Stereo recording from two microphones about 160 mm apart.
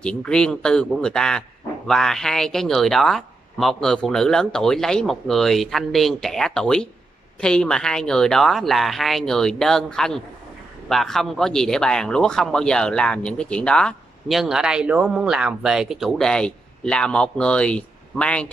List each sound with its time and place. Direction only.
0.0 s speech: 5° left (ahead or behind)